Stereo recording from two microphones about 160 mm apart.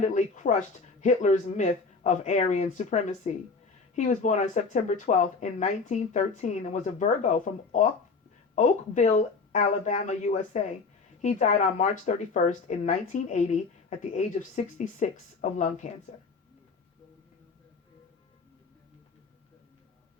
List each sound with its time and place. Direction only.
0.0 s speech: 50° left (ahead or behind)